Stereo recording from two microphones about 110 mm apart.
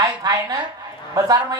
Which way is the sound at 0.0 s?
35° right (ahead or behind).